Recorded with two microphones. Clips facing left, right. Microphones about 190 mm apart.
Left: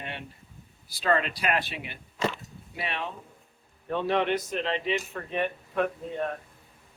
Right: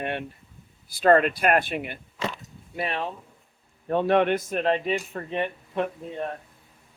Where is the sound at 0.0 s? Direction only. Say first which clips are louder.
Right 9 dB; 55° right (ahead or behind).